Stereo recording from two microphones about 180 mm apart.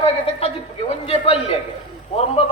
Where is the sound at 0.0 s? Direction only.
35° left (ahead or behind).